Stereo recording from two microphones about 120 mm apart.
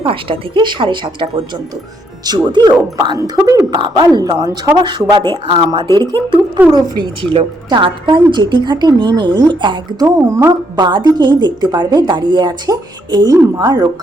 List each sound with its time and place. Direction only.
0.0 s a woman's voice: 45° right (ahead or behind)
10.2 s a woman's voice: 25° right (ahead or behind)